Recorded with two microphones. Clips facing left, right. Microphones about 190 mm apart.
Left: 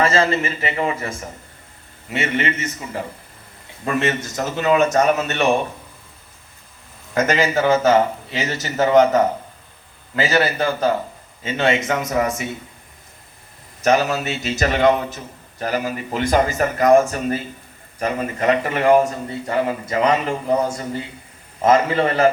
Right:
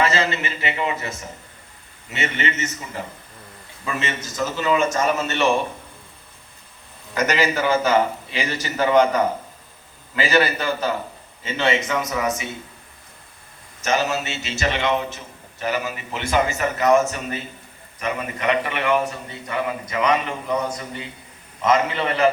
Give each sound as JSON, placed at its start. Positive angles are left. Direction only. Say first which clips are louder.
{"t": 0.0, "sound": "a man's voice", "louder": "left 4 dB", "side_deg": 35}
{"t": 2.0, "sound": "a man's voice", "louder": "left 4 dB", "side_deg": 50}
{"t": 3.8, "sound": "speech", "louder": "left 7 dB", "side_deg": 55}
{"t": 7.3, "sound": "a man's voice", "louder": "left 3 dB", "side_deg": 50}
{"t": 10.2, "sound": "a man's voice", "louder": "left 1 dB", "side_deg": 45}
{"t": 13.8, "sound": "a man's voice", "louder": "left 5 dB", "side_deg": 40}